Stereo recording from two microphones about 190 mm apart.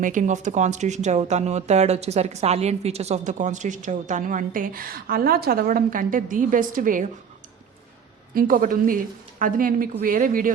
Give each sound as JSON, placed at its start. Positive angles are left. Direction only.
{"t": 0.0, "sound": "speech", "side_deg": -40}
{"t": 8.3, "sound": "speech", "side_deg": -50}